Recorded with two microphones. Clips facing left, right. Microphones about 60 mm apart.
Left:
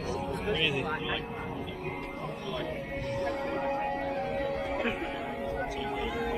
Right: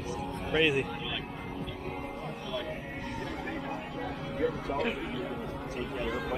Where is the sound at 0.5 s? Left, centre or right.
Centre.